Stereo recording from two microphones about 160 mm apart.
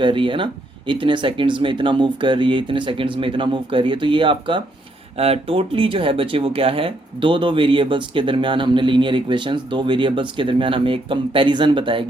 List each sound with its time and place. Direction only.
0.0 s speech: 30° right (ahead or behind)